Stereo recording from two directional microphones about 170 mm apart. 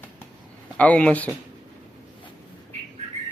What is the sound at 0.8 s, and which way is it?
Speech, 10° left (ahead or behind).